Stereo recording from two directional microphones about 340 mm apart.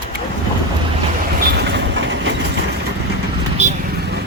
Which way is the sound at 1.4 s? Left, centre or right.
Right.